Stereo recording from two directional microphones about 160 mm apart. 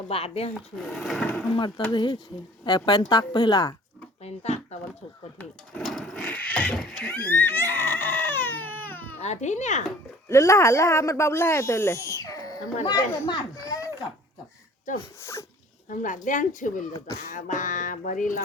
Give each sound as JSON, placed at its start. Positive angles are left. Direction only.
{"t": 0.1, "sound": "speech", "side_deg": 35}
{"t": 0.8, "sound": "speech", "side_deg": 0}
{"t": 1.5, "sound": "speech", "side_deg": 30}
{"t": 4.2, "sound": "a sound", "side_deg": 40}
{"t": 5.4, "sound": "a sound", "side_deg": 0}
{"t": 9.2, "sound": "speech", "side_deg": 45}
{"t": 10.2, "sound": "speech", "side_deg": 20}
{"t": 15.2, "sound": "speech", "side_deg": 15}
{"t": 15.9, "sound": "speech", "side_deg": 55}
{"t": 17.2, "sound": "speech", "side_deg": 65}